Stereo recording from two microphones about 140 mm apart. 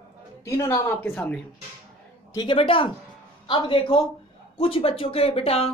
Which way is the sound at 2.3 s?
30° left (ahead or behind).